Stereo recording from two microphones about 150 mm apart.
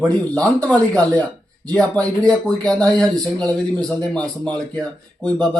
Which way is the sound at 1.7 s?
10° left (ahead or behind).